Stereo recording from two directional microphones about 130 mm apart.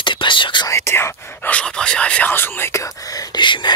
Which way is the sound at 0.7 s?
20° left (ahead or behind).